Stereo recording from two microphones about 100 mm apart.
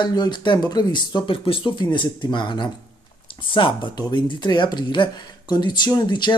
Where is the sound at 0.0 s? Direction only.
45° left (ahead or behind); by 1.7 s 60° left (ahead or behind).